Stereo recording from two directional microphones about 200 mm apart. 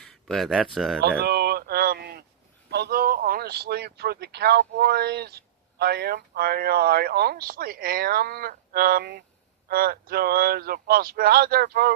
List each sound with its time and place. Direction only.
0.0 s speech: centre (ahead or behind)
1.2 s a sound: 55° right (ahead or behind)
2.6 s a man's voice: 55° right (ahead or behind)